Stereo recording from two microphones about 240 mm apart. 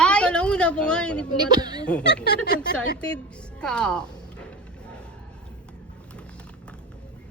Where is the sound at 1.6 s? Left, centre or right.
Centre.